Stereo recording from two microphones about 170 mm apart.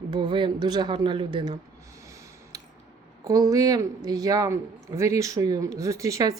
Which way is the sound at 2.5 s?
20° right (ahead or behind).